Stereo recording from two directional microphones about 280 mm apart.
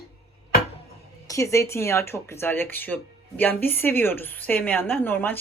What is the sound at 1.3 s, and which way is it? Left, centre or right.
Speech, centre.